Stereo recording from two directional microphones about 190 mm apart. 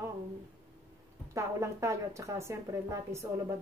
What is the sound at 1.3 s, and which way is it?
A woman's voice, 15° right (ahead or behind).